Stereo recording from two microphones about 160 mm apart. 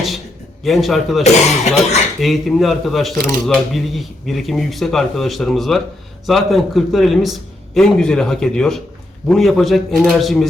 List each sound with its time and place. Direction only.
0.6 s a man's voice: centre (ahead or behind)
1.2 s speech: 45° left (ahead or behind)
2.2 s a man's voice: centre (ahead or behind)